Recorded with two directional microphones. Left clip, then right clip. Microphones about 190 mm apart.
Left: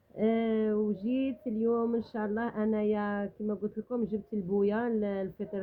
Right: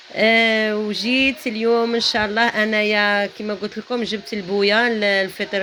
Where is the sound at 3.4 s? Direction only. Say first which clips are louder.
Right 9 dB; 30° right (ahead or behind).